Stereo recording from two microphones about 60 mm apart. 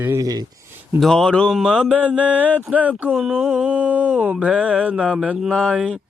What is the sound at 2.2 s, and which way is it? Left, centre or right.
Mantra, right.